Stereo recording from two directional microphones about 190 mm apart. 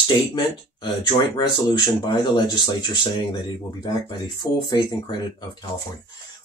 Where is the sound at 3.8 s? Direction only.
20° left (ahead or behind).